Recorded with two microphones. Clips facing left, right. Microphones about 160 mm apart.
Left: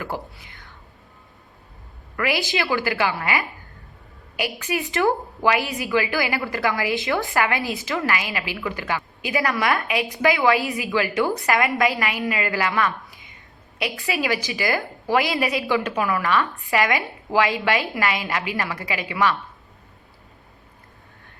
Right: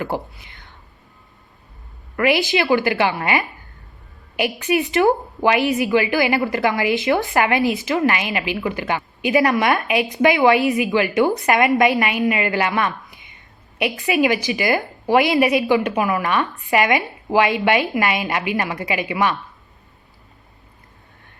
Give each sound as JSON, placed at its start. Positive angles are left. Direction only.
{"t": 0.3, "sound": "whispering", "side_deg": -20}
{"t": 2.1, "sound": "a woman's voice", "side_deg": -20}